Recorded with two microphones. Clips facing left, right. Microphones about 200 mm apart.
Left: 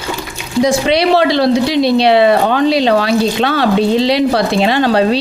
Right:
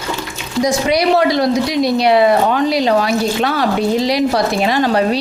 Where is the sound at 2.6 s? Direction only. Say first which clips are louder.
Left 3 dB; 25° left (ahead or behind).